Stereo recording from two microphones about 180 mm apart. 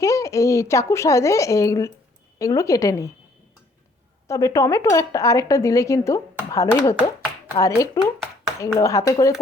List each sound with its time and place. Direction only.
0.0 s speech: 15° left (ahead or behind)
4.3 s speech: 15° left (ahead or behind)